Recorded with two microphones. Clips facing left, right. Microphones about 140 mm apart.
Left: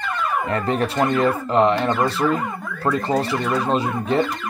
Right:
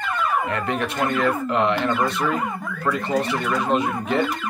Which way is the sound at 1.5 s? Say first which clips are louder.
Left 3 dB; 35° left (ahead or behind).